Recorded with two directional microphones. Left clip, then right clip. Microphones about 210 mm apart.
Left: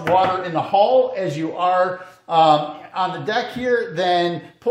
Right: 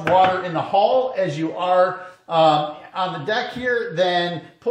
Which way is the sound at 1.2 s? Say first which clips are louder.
Left 1 dB; 35° left (ahead or behind).